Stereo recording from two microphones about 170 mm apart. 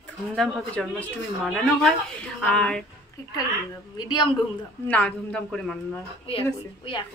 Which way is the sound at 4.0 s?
25° left (ahead or behind).